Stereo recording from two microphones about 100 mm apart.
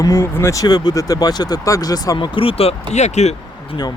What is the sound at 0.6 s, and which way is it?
Speech, 40° left (ahead or behind).